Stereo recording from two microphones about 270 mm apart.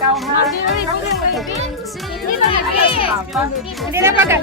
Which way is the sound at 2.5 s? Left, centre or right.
Centre.